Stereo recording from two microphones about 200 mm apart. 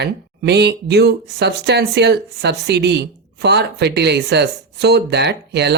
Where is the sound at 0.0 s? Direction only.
55° right (ahead or behind).